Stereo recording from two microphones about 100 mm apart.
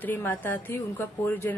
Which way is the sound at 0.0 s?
20° left (ahead or behind).